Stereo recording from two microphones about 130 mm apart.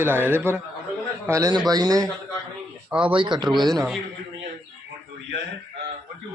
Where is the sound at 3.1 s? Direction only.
35° right (ahead or behind).